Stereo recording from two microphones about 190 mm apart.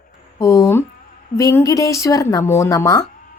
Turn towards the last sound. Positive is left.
turn(degrees=20)  # may be behind; listen again after turning